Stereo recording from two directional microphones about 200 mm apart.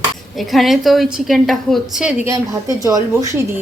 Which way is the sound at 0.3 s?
Centre (ahead or behind).